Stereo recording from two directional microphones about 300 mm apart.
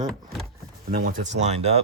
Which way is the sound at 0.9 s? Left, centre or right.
Right.